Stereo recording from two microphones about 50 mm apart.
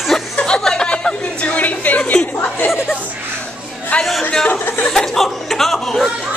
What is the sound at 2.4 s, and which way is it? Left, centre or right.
Chatter, left.